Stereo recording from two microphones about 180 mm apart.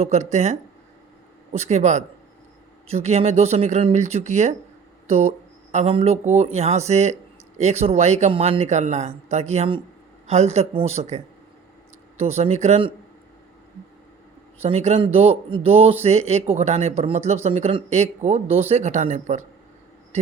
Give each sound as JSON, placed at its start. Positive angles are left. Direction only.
{"t": 0.0, "sound": "speech", "side_deg": -40}
{"t": 1.5, "sound": "speech", "side_deg": -40}
{"t": 14.6, "sound": "speech", "side_deg": -35}